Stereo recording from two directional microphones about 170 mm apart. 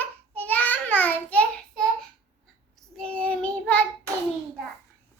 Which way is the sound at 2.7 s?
5° left (ahead or behind).